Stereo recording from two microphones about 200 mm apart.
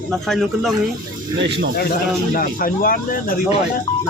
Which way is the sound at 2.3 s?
45° left (ahead or behind).